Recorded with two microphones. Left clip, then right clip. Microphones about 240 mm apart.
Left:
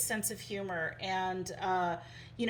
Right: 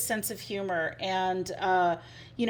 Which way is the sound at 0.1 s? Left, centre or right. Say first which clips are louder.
Right 5 dB; right.